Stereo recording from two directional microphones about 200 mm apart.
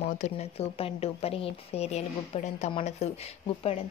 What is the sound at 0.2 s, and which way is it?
Speech, 30° left (ahead or behind).